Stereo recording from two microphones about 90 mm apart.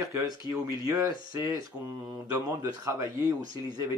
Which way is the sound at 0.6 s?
40° right (ahead or behind).